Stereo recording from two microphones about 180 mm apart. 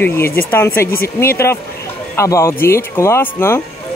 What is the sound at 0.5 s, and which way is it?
A man's voice, 15° left (ahead or behind).